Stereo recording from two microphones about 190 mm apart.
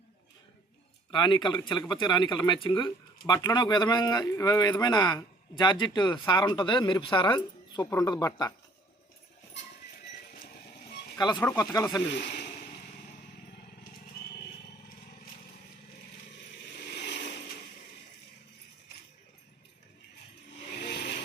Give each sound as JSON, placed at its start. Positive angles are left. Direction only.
{"t": 1.1, "sound": "speech", "side_deg": 25}
{"t": 11.2, "sound": "speech", "side_deg": 20}
{"t": 12.0, "sound": "speech", "side_deg": 65}
{"t": 16.9, "sound": "vehicle", "side_deg": 60}
{"t": 20.7, "sound": "vehicle", "side_deg": 60}